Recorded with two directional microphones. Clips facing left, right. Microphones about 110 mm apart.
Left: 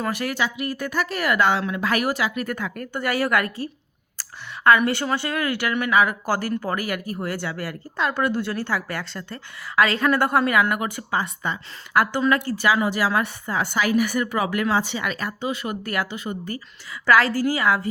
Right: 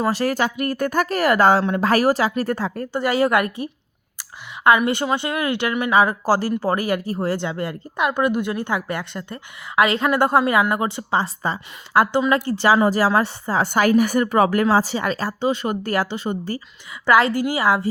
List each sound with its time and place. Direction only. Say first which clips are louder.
0.0 s speech: right 5 dB; 35° right (ahead or behind)
4.2 s a sound: right 2 dB; 20° right (ahead or behind)
4.9 s speech: right 3 dB; 20° right (ahead or behind)
13.7 s speech: right 5 dB; 45° right (ahead or behind); by 17.8 s 25° right (ahead or behind)